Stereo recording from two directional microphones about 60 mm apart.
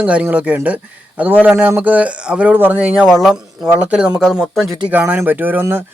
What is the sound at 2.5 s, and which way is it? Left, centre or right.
Speech, right.